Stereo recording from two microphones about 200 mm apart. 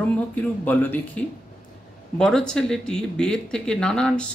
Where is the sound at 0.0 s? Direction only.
10° left (ahead or behind).